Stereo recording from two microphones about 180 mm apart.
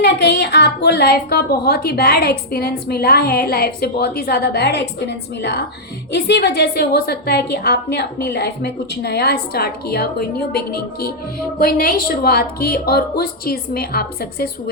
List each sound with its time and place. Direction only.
0.0 s a woman's voice: 70° left (ahead or behind)